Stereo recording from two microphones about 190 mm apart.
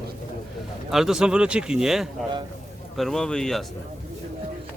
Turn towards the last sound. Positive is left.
turn(degrees=5)  # may be behind; listen again after turning